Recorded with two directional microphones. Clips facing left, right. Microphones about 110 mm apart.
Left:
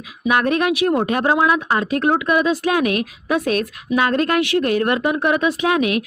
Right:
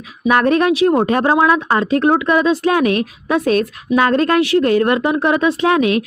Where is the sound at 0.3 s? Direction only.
35° right (ahead or behind).